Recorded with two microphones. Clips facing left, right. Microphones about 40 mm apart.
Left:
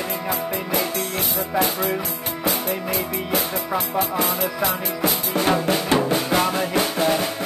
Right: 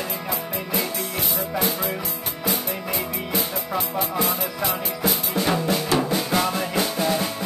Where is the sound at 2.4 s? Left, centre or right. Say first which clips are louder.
Left 3 dB; left.